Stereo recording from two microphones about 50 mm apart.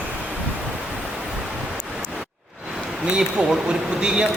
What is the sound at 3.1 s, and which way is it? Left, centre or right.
A man's voice, centre.